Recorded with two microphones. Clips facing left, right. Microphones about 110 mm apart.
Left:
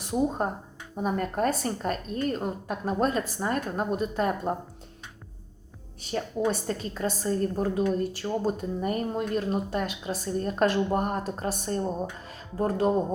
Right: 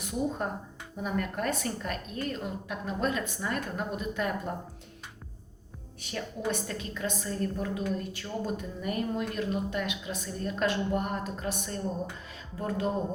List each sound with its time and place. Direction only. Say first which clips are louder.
0.0 s a woman's voice: left 5 dB; 35° left (ahead or behind)
6.0 s a woman's voice: left 7 dB; 35° left (ahead or behind)